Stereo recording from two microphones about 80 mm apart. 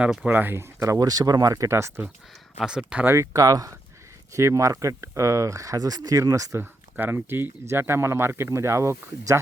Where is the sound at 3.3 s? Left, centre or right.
Right.